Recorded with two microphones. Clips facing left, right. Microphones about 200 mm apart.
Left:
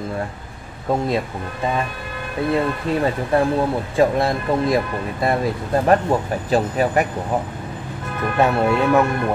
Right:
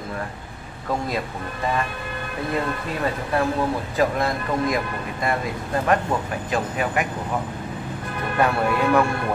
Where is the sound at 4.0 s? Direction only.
30° left (ahead or behind).